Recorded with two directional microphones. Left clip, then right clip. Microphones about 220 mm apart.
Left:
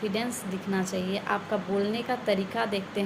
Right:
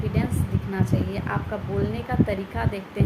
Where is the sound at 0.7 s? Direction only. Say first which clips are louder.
Right 1 dB; 10° right (ahead or behind).